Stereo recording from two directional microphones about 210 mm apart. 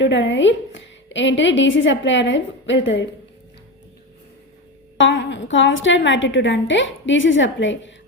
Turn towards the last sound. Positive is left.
turn(degrees=60)  # may be behind; listen again after turning